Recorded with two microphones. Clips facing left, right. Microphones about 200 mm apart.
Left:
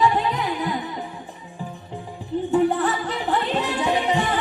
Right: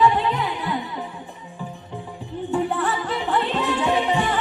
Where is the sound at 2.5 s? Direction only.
40° left (ahead or behind).